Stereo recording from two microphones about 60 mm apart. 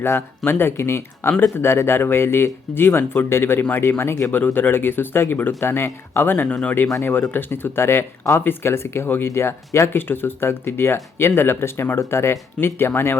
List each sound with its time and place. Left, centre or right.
0.0 s speech: left
4.3 s speech: left
6.5 s speech: centre
7.0 s speech: left
10.0 s speech: left